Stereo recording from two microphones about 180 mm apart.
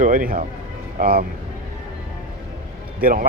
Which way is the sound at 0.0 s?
50° right (ahead or behind).